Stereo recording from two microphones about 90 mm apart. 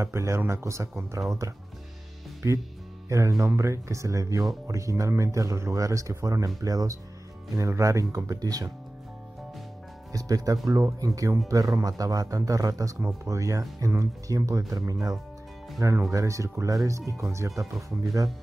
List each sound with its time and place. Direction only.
0.0 s speech: 30° right (ahead or behind)
10.1 s speech: 45° right (ahead or behind)